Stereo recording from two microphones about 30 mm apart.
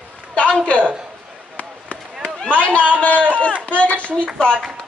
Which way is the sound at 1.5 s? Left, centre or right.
Left.